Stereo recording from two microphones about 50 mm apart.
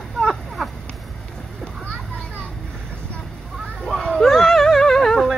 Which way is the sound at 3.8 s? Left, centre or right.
Centre.